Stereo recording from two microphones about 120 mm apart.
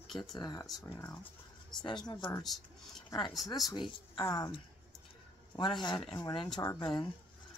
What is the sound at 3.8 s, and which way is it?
Speech, 45° left (ahead or behind).